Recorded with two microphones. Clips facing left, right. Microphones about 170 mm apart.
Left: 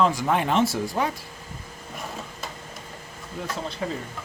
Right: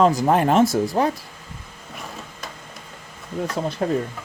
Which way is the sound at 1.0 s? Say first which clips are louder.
Right 5 dB; 35° right (ahead or behind).